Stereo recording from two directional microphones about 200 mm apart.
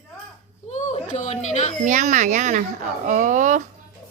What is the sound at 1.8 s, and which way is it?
Speech, 35° right (ahead or behind).